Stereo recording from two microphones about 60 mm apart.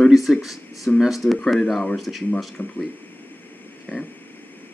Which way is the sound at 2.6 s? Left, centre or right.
Left.